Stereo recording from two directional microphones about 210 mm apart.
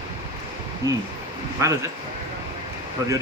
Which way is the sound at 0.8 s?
15° right (ahead or behind).